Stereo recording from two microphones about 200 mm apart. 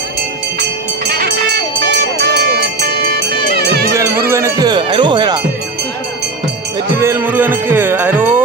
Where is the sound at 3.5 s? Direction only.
50° right (ahead or behind).